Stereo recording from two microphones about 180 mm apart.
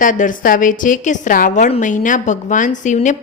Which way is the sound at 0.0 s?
45° left (ahead or behind).